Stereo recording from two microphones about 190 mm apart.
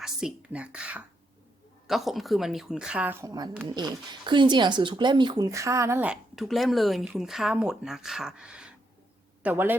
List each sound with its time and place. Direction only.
0.0 s a man's voice: 5° right (ahead or behind)